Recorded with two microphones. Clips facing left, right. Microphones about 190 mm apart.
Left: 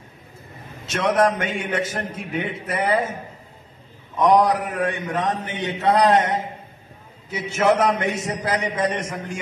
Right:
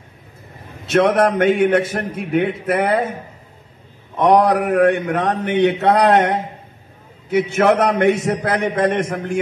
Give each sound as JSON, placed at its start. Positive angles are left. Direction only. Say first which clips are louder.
{"t": 0.8, "sound": "a man's voice", "louder": "right 5 dB", "side_deg": -60}
{"t": 4.2, "sound": "a man's voice", "louder": "right 3 dB", "side_deg": -65}